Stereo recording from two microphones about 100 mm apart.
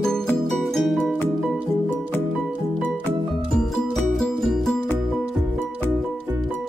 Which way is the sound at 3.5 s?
5° left (ahead or behind).